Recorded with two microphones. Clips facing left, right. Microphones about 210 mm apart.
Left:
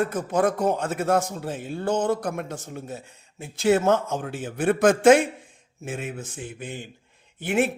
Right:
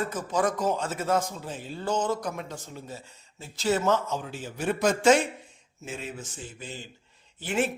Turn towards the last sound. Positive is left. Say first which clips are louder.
# left 5 dB
turn(degrees=60)  # may be behind; listen again after turning